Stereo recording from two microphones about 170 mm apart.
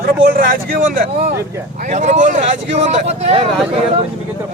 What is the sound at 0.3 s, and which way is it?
Speech, 55° right (ahead or behind).